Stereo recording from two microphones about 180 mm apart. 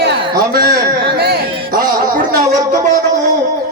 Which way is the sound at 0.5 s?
60° right (ahead or behind).